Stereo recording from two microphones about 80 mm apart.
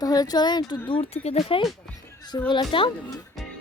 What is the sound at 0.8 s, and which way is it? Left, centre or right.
Speech, left.